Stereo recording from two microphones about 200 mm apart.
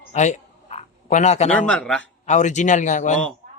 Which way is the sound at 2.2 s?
35° left (ahead or behind).